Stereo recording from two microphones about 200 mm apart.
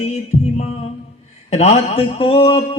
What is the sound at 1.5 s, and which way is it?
A man's voice, 30° left (ahead or behind).